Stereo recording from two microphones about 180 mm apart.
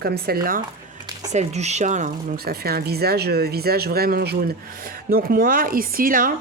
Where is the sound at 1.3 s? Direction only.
40° right (ahead or behind).